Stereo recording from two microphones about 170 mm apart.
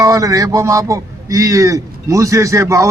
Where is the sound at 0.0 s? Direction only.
20° right (ahead or behind).